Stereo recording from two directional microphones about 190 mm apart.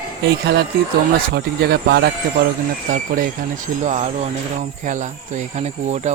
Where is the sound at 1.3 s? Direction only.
60° right (ahead or behind).